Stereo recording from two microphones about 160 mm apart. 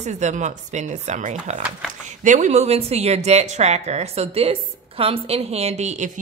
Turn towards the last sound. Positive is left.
turn(degrees=-45)  # may be behind; listen again after turning